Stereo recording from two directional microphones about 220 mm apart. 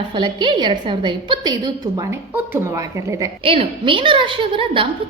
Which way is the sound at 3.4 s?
25° right (ahead or behind).